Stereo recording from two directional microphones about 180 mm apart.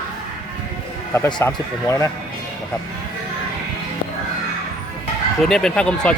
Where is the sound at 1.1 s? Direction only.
15° left (ahead or behind).